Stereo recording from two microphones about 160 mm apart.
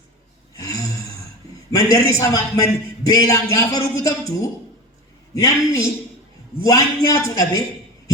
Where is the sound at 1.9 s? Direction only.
20° left (ahead or behind).